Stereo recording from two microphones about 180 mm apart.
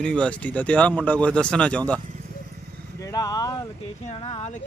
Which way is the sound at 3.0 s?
20° left (ahead or behind).